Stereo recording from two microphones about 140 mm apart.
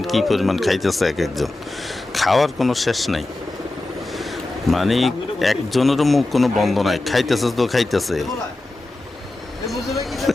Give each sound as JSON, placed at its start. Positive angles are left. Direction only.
{"t": 0.0, "sound": "speech", "side_deg": 0}
{"t": 4.7, "sound": "speech", "side_deg": 0}
{"t": 9.6, "sound": "a sound", "side_deg": 0}